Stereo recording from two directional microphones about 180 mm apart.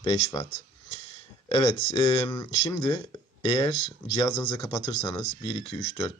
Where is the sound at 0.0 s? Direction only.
30° left (ahead or behind).